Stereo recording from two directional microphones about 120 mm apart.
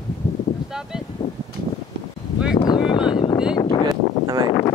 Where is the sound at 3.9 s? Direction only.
35° right (ahead or behind).